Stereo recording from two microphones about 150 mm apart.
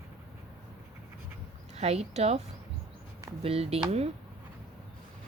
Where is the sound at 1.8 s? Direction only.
45° right (ahead or behind).